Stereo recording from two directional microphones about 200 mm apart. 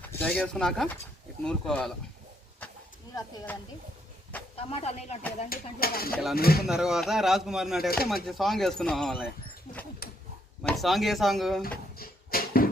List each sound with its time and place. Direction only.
0.0 s speech: 10° left (ahead or behind)
3.2 s speech: 15° left (ahead or behind)
4.5 s speech: 30° left (ahead or behind)
5.5 s speech: 50° left (ahead or behind)
6.7 s speech: 5° right (ahead or behind)
9.7 s speech: 35° left (ahead or behind)
10.6 s speech: centre (ahead or behind)
11.9 s a sound: 45° left (ahead or behind)